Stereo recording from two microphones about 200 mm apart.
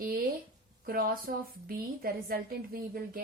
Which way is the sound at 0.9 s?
45° right (ahead or behind).